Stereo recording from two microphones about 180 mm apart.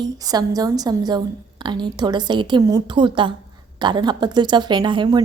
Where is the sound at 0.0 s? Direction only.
20° right (ahead or behind).